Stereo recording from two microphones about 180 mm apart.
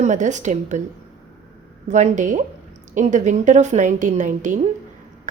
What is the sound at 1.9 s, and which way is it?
A woman's voice, 40° right (ahead or behind).